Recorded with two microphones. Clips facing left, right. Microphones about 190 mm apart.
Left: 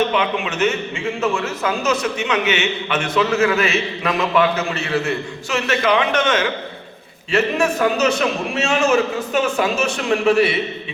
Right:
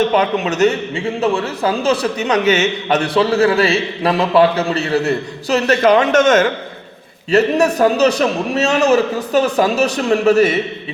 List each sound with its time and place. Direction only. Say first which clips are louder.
0.1 s a man's voice: right 5 dB; 40° right (ahead or behind)